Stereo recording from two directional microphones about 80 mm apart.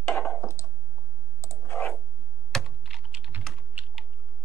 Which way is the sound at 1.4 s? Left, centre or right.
Left.